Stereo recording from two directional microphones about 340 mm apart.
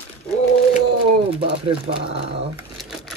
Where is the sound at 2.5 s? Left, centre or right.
Centre.